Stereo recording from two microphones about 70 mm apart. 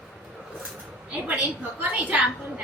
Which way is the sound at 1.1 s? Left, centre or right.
Centre.